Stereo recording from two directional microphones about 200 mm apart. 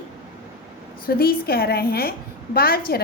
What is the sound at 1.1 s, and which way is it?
A woman's voice, 50° left (ahead or behind).